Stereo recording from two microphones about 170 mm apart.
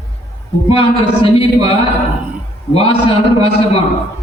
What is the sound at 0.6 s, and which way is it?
A man's voice, 35° left (ahead or behind).